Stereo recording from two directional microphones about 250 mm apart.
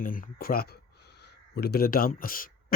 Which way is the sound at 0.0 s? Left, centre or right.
Left.